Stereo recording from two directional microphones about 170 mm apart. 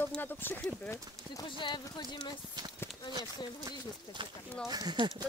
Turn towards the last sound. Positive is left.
turn(degrees=-25)  # may be behind; listen again after turning